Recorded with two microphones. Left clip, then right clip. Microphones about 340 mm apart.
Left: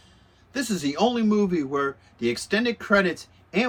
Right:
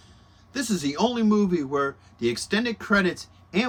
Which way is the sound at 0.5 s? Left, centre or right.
Centre.